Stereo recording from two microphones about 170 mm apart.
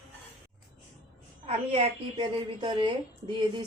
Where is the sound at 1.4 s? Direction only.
30° right (ahead or behind).